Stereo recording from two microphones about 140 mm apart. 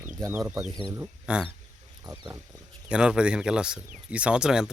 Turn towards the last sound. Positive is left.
turn(degrees=-5)  # may be behind; listen again after turning